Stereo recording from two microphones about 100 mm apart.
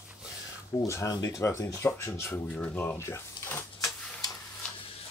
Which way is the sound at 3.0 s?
25° left (ahead or behind).